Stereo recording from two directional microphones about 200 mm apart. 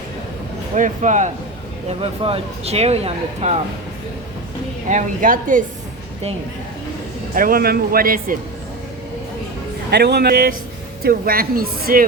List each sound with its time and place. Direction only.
0.8 s speech: 40° right (ahead or behind)
1.9 s speech: 30° right (ahead or behind)
4.9 s speech: 40° right (ahead or behind)
7.3 s speech: 45° right (ahead or behind)
9.9 s speech: 55° right (ahead or behind)